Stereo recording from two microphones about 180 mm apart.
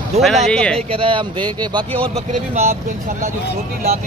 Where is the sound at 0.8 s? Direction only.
30° right (ahead or behind).